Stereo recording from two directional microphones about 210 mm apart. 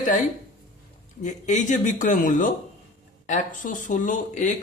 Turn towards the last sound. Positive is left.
turn(degrees=35)  # may be behind; listen again after turning